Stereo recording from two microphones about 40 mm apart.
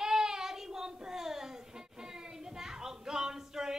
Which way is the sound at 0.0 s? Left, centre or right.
Centre.